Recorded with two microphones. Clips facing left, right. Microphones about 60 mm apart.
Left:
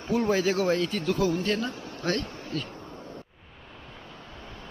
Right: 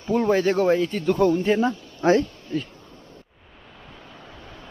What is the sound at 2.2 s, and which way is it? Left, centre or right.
Bee, left.